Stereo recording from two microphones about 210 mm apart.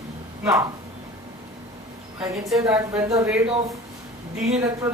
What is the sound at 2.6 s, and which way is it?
Speech, 15° right (ahead or behind).